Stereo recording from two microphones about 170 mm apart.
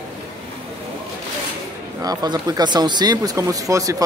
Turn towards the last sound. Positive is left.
turn(degrees=-20)  # may be behind; listen again after turning